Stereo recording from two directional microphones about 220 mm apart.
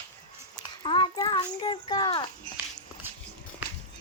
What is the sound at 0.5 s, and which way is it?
Child singing, 20° left (ahead or behind).